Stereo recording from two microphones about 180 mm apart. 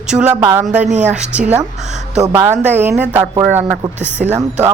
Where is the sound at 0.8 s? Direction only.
40° right (ahead or behind).